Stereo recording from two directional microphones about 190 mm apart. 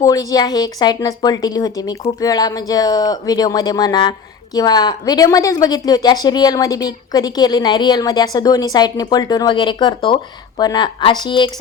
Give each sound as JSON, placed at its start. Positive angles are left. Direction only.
{"t": 0.0, "sound": "a woman's voice", "side_deg": 20}